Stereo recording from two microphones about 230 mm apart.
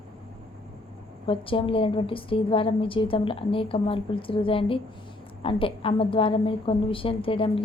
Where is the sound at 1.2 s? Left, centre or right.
Left.